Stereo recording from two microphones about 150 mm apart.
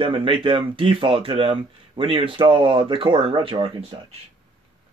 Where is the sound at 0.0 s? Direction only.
35° right (ahead or behind).